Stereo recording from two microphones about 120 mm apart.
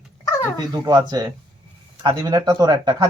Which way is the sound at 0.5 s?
35° right (ahead or behind).